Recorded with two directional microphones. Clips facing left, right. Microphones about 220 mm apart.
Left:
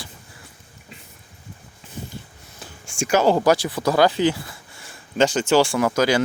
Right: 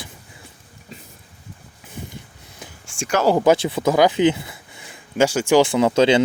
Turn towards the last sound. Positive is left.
turn(degrees=-25)  # may be behind; listen again after turning